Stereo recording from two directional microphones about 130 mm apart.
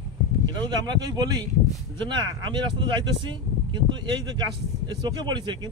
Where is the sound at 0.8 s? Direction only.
30° right (ahead or behind).